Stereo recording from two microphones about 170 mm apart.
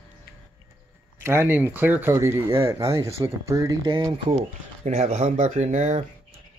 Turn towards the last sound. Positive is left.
turn(degrees=-40)  # may be behind; listen again after turning